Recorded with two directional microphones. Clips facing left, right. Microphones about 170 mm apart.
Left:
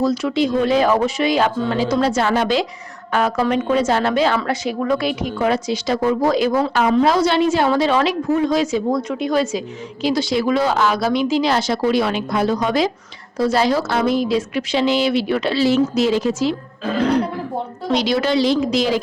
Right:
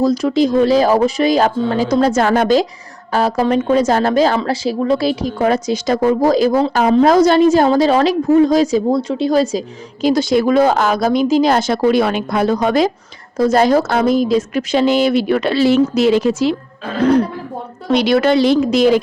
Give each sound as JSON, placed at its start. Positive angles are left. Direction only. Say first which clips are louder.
{"t": 0.0, "sound": "speech", "louder": "right 4 dB", "side_deg": -40}
{"t": 3.1, "sound": "a woman's voice", "louder": "right 3 dB", "side_deg": -35}
{"t": 17.9, "sound": "a woman's voice", "louder": "right 5 dB", "side_deg": -60}